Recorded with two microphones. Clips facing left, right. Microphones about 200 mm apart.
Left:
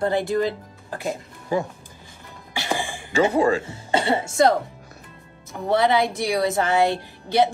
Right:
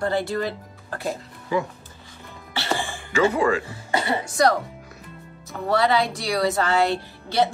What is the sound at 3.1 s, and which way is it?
A woman's voice, 35° left (ahead or behind).